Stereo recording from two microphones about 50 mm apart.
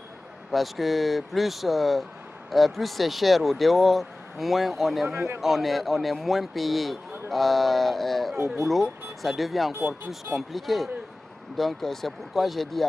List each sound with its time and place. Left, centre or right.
0.5 s speech: centre
5.0 s a man's voice: centre
5.4 s speech: centre